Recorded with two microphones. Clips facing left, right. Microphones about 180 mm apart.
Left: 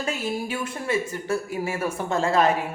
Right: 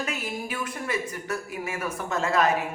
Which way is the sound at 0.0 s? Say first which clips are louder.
Left 4 dB; 30° left (ahead or behind).